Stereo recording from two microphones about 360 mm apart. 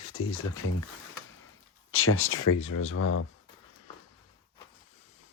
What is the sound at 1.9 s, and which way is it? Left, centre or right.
Speech, left.